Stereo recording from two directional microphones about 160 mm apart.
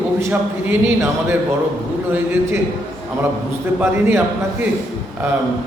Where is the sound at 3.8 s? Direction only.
15° right (ahead or behind).